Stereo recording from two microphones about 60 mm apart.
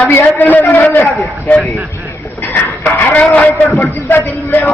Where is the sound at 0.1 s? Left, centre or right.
Left.